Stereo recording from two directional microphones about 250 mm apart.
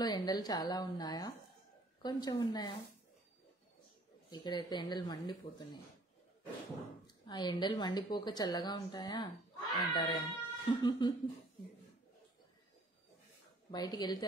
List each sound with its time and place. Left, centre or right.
0.0 s a woman's voice: centre
4.3 s a woman's voice: centre
7.2 s a woman's voice: centre
13.7 s a woman's voice: centre